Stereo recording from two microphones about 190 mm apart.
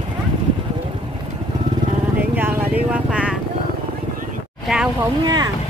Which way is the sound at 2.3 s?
10° right (ahead or behind).